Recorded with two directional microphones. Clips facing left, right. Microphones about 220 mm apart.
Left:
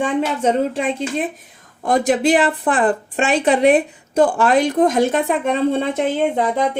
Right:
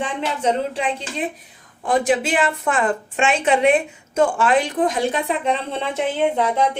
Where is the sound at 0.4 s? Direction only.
45° left (ahead or behind).